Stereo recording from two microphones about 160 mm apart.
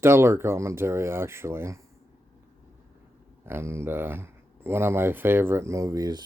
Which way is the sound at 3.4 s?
15° right (ahead or behind).